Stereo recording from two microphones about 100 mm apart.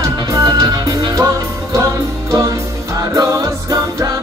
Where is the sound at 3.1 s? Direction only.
35° right (ahead or behind).